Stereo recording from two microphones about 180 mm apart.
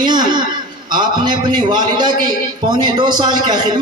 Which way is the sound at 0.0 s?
25° right (ahead or behind).